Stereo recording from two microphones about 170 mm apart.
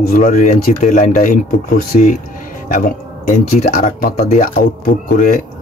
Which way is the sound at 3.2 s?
55° left (ahead or behind).